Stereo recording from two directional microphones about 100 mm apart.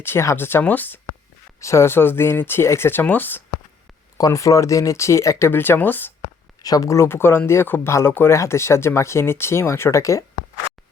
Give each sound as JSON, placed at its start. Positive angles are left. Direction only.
{"t": 0.0, "sound": "speech", "side_deg": 25}
{"t": 4.2, "sound": "speech", "side_deg": 30}
{"t": 6.6, "sound": "speech", "side_deg": 40}